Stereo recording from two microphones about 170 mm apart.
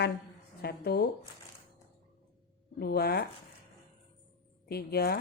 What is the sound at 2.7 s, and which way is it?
Speech, 65° left (ahead or behind).